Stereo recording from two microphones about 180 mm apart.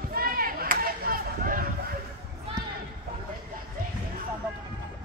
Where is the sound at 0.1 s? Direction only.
55° right (ahead or behind).